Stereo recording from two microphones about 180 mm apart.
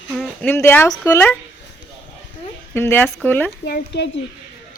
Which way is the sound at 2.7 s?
10° left (ahead or behind).